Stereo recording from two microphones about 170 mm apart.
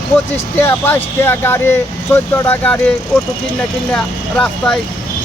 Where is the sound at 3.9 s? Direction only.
5° left (ahead or behind).